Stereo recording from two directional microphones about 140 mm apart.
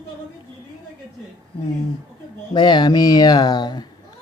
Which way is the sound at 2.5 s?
30° left (ahead or behind).